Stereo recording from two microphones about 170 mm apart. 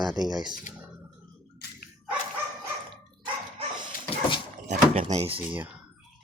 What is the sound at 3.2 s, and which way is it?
Dog, 25° right (ahead or behind).